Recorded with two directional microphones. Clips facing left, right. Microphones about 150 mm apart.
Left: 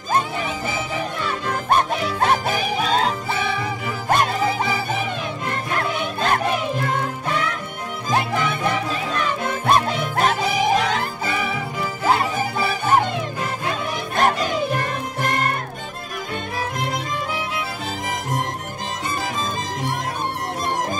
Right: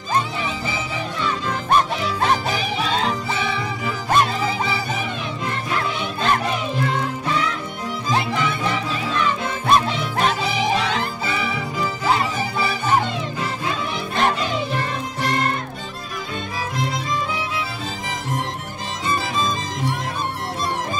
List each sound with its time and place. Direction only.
0.1 s music: 50° left (ahead or behind)
16.5 s music: 55° left (ahead or behind)